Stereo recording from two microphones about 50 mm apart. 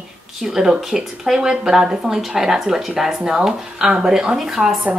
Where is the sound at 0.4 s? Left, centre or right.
Centre.